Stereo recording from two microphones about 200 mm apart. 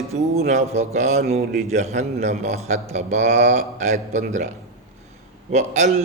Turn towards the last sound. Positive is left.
turn(degrees=-35)  # may be behind; listen again after turning